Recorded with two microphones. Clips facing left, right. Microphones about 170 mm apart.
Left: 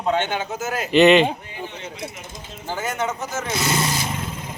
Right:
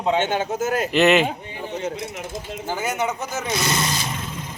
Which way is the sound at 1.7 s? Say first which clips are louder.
Right 8 dB; 45° right (ahead or behind).